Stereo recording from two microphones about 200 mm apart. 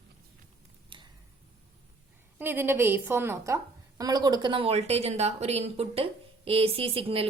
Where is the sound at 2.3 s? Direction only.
10° right (ahead or behind).